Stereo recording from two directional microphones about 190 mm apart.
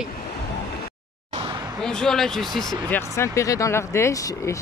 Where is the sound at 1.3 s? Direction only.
25° right (ahead or behind).